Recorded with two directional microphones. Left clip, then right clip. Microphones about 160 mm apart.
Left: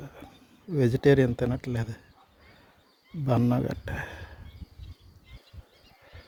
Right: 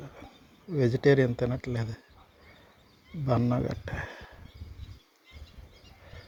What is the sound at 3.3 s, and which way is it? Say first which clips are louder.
Speech: left 2 dB; 35° left (ahead or behind).